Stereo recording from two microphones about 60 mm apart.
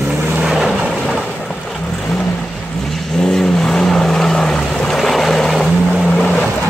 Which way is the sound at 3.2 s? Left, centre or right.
Centre.